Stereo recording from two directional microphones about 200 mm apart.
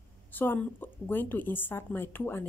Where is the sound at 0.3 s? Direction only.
10° left (ahead or behind).